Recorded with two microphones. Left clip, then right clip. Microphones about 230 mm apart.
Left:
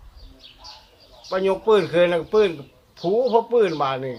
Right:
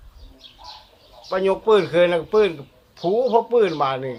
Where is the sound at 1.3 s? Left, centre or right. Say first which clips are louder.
Right 1 dB; centre.